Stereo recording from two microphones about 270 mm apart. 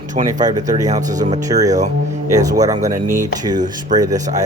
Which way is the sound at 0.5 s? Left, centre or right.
Centre.